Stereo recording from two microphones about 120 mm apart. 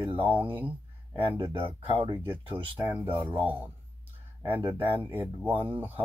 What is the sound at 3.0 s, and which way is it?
Speech, 45° right (ahead or behind).